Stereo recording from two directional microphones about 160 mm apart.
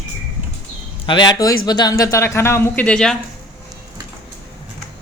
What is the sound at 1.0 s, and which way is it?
Speech, 30° left (ahead or behind).